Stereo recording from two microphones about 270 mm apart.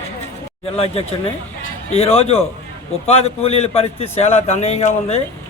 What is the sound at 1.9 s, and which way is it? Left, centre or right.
Speech, left.